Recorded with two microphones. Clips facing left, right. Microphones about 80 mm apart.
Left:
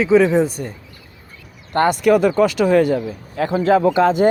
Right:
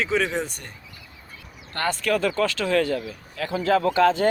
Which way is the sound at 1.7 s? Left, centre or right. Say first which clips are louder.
Left 10 dB; left.